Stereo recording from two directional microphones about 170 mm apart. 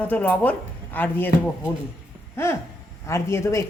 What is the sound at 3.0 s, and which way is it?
Speech, 15° left (ahead or behind).